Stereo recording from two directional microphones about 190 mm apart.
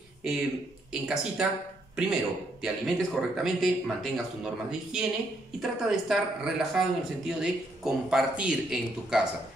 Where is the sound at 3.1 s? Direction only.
Centre (ahead or behind).